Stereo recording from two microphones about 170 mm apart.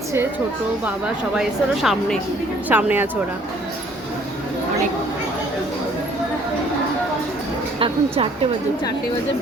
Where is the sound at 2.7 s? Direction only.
10° right (ahead or behind).